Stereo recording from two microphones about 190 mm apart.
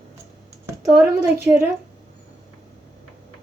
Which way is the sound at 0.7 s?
15° right (ahead or behind).